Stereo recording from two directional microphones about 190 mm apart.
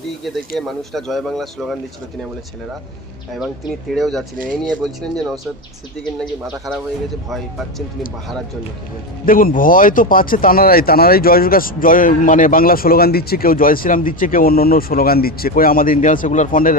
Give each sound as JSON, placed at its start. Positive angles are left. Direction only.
{"t": 0.6, "sound": "a man's voice", "side_deg": 0}
{"t": 3.3, "sound": "a man's voice", "side_deg": 0}
{"t": 9.2, "sound": "speech", "side_deg": 45}